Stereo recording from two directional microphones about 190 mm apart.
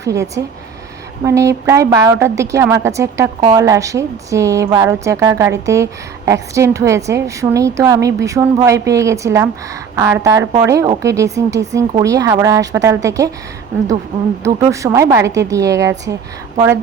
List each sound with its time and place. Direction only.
0.0 s a woman's voice: 15° right (ahead or behind)
14.4 s a woman's voice: 15° right (ahead or behind)